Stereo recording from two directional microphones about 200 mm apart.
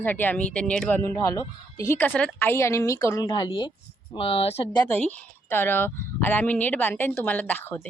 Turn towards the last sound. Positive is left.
turn(degrees=10)  # may be behind; listen again after turning